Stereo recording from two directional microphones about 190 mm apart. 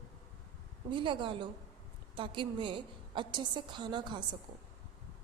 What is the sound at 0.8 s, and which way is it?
Speech, 25° right (ahead or behind).